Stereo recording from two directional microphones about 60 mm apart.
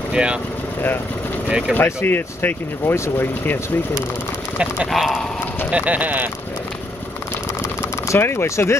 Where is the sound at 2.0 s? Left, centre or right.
Left.